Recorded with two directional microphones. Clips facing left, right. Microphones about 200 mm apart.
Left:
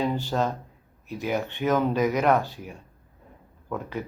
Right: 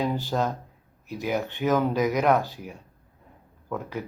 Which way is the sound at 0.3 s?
5° right (ahead or behind).